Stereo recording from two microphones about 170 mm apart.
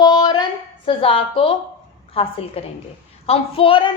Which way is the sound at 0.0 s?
25° left (ahead or behind).